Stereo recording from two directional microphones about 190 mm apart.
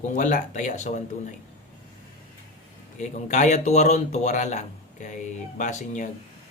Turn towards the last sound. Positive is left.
turn(degrees=40)  # may be behind; listen again after turning